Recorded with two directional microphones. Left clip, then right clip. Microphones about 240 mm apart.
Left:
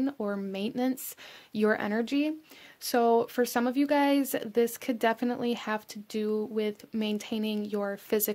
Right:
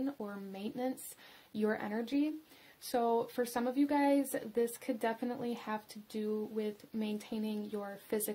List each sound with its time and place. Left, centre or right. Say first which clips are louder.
0.0 s speech: left 9 dB; left